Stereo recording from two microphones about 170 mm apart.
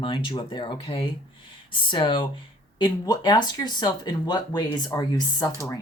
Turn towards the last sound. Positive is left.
turn(degrees=25)  # may be behind; listen again after turning